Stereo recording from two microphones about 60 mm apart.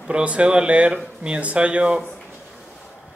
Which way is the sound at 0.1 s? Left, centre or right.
Centre.